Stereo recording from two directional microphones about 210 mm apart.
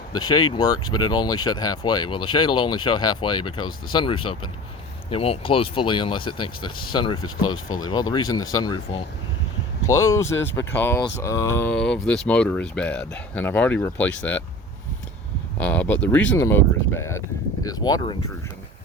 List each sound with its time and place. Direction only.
0.1 s speech: 20° left (ahead or behind)
15.5 s speech: 5° left (ahead or behind)